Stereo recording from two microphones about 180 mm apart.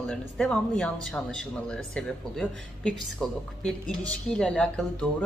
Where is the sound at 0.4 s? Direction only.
5° left (ahead or behind).